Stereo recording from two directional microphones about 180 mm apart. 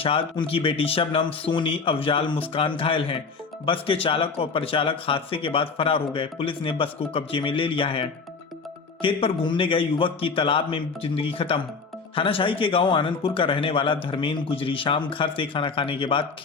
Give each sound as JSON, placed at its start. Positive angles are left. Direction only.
{"t": 0.0, "sound": "a man's voice", "side_deg": 30}